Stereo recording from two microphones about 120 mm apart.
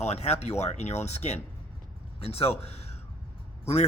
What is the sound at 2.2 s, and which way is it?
Speech, 55° left (ahead or behind).